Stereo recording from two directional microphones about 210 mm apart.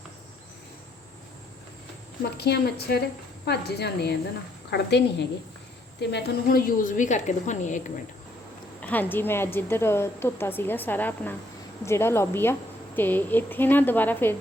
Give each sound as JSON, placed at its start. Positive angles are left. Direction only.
{"t": 2.4, "sound": "a woman's voice", "side_deg": 50}
{"t": 8.8, "sound": "a woman's voice", "side_deg": 10}